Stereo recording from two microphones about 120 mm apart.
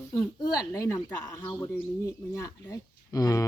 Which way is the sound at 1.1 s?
15° left (ahead or behind).